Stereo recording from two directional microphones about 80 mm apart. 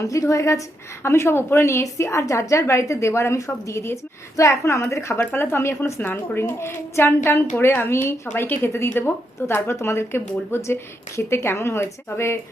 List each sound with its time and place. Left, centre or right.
0.0 s a woman's voice: left